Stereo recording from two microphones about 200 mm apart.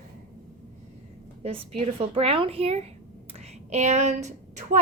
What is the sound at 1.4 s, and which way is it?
A woman's voice, 30° right (ahead or behind).